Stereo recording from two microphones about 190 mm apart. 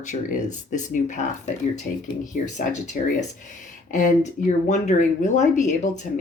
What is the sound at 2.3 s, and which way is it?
Speech, 40° left (ahead or behind).